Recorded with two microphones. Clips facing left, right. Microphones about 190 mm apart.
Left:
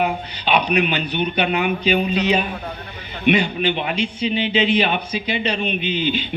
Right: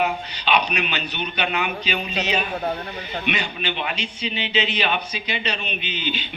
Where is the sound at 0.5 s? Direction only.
50° left (ahead or behind).